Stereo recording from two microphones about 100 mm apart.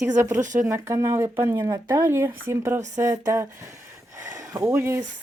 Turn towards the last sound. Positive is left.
turn(degrees=-25)  # may be behind; listen again after turning